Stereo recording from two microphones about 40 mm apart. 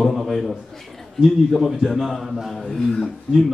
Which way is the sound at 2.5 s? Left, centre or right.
Centre.